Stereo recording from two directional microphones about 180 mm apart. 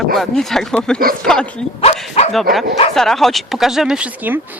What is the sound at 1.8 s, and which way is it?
Speech, 35° left (ahead or behind).